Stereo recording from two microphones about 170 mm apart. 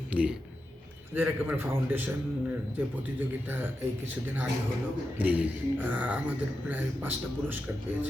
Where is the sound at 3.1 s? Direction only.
10° right (ahead or behind).